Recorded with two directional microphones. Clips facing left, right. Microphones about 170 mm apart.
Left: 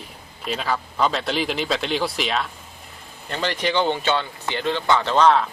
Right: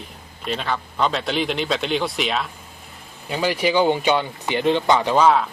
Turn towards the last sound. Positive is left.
turn(degrees=-5)  # may be behind; listen again after turning